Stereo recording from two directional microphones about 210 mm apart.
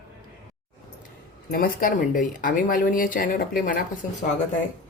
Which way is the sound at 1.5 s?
40° left (ahead or behind).